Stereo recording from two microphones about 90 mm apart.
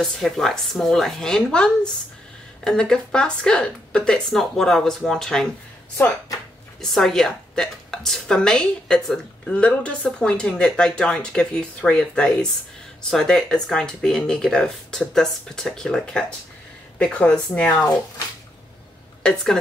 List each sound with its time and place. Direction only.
0.0 s a woman's voice: 5° left (ahead or behind)
6.8 s a woman's voice: 5° left (ahead or behind)
19.2 s speech: 5° left (ahead or behind)